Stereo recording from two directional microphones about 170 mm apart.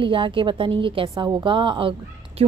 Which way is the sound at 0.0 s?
30° right (ahead or behind).